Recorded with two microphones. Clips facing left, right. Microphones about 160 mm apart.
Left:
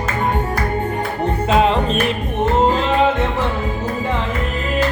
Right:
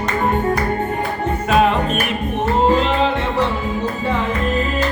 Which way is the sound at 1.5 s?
25° left (ahead or behind).